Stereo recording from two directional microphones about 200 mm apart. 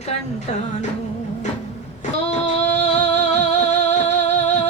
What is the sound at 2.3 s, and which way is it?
Music, 35° left (ahead or behind).